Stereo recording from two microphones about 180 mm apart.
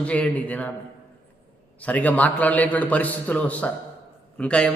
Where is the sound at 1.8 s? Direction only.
10° left (ahead or behind).